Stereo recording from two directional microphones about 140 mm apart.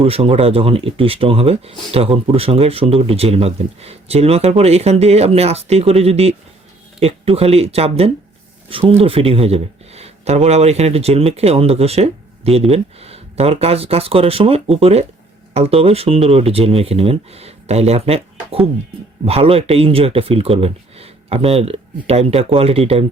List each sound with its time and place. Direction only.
0.0 s speech: 45° right (ahead or behind)